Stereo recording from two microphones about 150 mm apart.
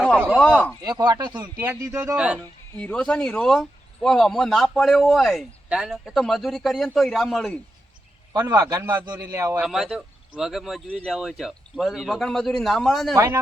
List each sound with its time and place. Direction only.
0.3 s speech: 5° left (ahead or behind)
0.9 s a man's voice: 25° right (ahead or behind)
1.5 s speech: 15° right (ahead or behind)
2.1 s speech: 5° right (ahead or behind)
2.7 s speech: 10° left (ahead or behind)
8.3 s a man's voice: 25° right (ahead or behind)
9.6 s speech: 5° right (ahead or behind)
13.1 s a man's voice: 20° right (ahead or behind)